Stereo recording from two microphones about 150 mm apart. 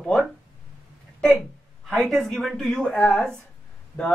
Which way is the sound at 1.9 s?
Centre (ahead or behind).